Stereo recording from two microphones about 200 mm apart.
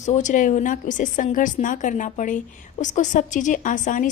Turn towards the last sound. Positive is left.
turn(degrees=40)  # may be behind; listen again after turning